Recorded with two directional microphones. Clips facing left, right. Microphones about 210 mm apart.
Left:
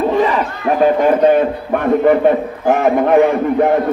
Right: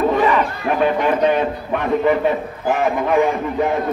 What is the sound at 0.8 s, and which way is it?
A man's voice, 45° left (ahead or behind).